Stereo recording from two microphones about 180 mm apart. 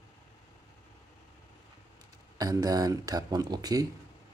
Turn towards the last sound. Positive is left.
turn(degrees=-20)  # may be behind; listen again after turning